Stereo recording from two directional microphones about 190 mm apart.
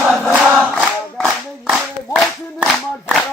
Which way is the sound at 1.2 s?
Centre (ahead or behind).